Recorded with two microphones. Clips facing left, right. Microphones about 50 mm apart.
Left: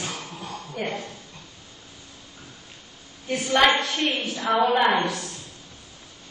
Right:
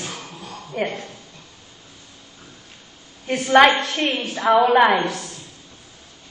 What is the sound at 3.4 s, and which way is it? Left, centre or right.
A woman's voice, right.